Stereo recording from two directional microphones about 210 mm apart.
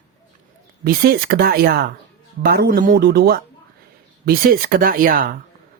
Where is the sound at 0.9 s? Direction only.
45° right (ahead or behind).